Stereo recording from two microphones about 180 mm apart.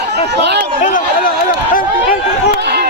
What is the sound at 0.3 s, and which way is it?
Speech, 70° right (ahead or behind).